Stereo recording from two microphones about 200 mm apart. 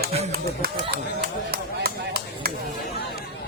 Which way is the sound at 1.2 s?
50° right (ahead or behind).